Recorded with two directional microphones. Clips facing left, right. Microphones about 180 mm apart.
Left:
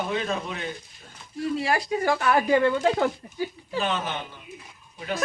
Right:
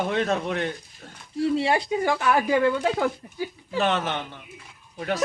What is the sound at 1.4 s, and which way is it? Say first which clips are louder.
Speech: right 3 dB; 25° right (ahead or behind).